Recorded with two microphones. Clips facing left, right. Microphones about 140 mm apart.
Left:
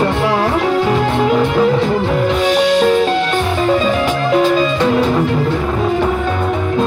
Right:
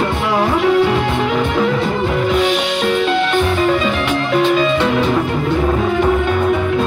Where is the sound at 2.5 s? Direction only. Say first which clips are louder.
Left 5 dB; 40° left (ahead or behind).